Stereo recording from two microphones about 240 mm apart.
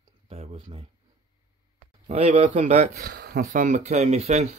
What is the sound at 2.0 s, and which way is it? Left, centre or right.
Speech, right.